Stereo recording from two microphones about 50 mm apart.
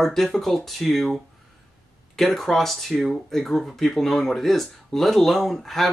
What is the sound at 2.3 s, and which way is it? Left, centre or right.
Speech, centre.